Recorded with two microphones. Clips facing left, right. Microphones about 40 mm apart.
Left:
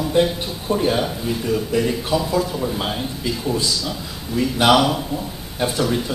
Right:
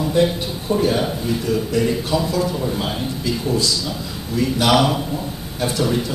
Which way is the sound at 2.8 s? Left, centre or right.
Centre.